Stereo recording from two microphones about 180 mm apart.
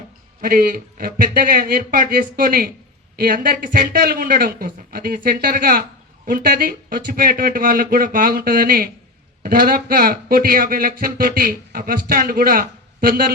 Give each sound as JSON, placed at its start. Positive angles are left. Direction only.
{"t": 0.4, "sound": "speech", "side_deg": -55}